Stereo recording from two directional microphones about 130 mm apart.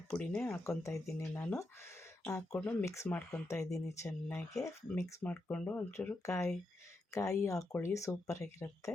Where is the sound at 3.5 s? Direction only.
20° left (ahead or behind).